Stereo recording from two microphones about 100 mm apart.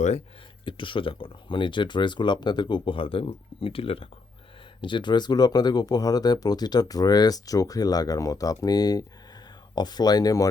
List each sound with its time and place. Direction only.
0.6 s speech: 55° left (ahead or behind)
4.8 s speech: 55° left (ahead or behind); by 10.5 s 35° left (ahead or behind)